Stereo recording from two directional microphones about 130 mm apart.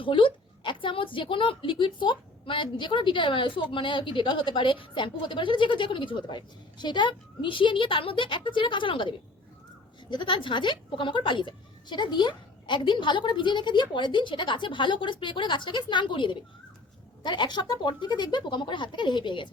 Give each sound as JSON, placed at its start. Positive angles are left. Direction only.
{"t": 0.0, "sound": "a woman's voice", "side_deg": 40}